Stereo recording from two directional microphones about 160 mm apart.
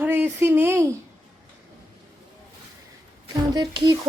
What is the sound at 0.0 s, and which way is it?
Speech, 10° right (ahead or behind).